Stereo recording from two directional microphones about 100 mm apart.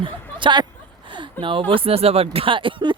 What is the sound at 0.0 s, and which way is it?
Speech, 55° right (ahead or behind).